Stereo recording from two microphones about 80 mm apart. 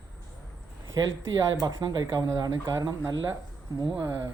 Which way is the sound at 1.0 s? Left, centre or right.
Right.